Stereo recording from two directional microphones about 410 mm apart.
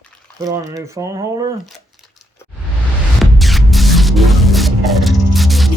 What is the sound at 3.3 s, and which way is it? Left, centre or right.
Music, centre.